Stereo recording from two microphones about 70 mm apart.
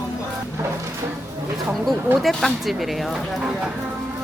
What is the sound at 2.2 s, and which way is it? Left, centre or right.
Speech, centre.